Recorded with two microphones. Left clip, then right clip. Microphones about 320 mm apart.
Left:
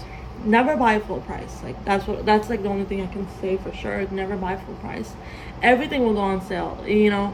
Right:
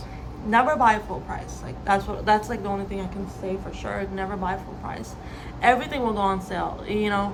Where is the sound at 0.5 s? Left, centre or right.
Right.